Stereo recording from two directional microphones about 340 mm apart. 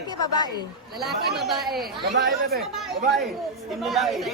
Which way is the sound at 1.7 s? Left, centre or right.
Right.